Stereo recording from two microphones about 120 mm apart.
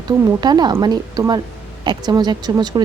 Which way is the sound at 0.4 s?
35° right (ahead or behind).